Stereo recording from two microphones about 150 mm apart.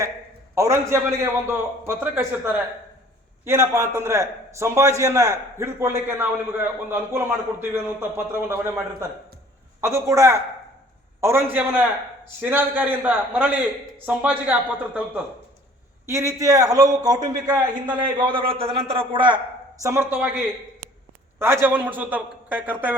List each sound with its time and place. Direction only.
0.5 s a man's voice: 20° right (ahead or behind)
16.0 s a man's voice: 20° right (ahead or behind)
19.8 s a man's voice: 15° right (ahead or behind)
21.3 s a man's voice: 15° right (ahead or behind)